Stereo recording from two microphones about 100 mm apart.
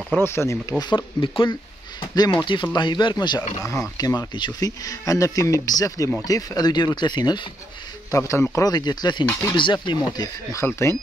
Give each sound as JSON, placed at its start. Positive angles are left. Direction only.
{"t": 0.2, "sound": "speech", "side_deg": 25}
{"t": 0.7, "sound": "speech", "side_deg": 50}
{"t": 3.6, "sound": "speech", "side_deg": 30}
{"t": 8.1, "sound": "speech", "side_deg": 30}
{"t": 10.6, "sound": "speech", "side_deg": 25}